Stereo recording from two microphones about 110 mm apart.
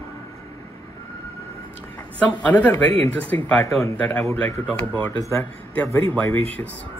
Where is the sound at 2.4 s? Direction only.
15° left (ahead or behind).